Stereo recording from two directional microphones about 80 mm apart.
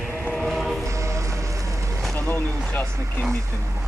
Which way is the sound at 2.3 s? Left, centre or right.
Left.